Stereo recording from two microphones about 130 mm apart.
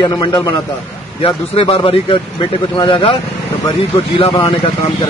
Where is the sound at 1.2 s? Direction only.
50° left (ahead or behind).